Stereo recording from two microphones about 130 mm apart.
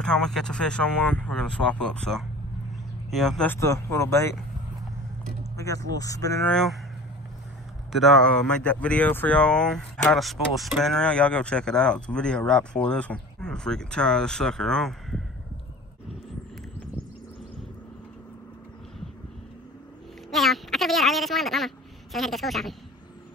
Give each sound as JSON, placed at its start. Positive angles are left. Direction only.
{"t": 0.0, "sound": "speech", "side_deg": 5}
{"t": 3.4, "sound": "speech", "side_deg": 20}
{"t": 5.4, "sound": "speech", "side_deg": 25}
{"t": 6.4, "sound": "speech", "side_deg": 5}
{"t": 7.9, "sound": "speech", "side_deg": 0}
{"t": 20.2, "sound": "a sound", "side_deg": 0}